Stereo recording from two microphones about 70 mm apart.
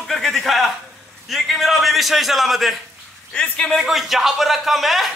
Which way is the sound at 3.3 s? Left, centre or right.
Centre.